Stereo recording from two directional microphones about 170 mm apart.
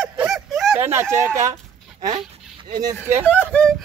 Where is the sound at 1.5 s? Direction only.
25° right (ahead or behind).